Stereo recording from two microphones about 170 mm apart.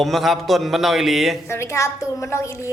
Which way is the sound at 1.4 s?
15° left (ahead or behind).